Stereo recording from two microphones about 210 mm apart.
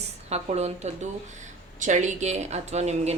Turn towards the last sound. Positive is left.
turn(degrees=-30)  # may be behind; listen again after turning